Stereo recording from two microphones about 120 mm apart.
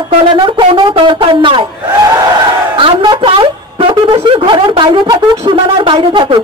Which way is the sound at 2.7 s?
45° right (ahead or behind).